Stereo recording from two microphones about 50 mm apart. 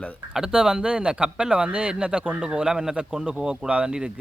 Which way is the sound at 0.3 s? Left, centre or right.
Centre.